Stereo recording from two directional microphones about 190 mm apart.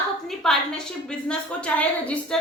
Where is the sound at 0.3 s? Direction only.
Centre (ahead or behind).